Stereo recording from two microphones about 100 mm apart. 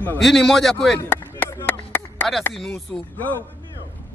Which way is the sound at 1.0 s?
25° left (ahead or behind).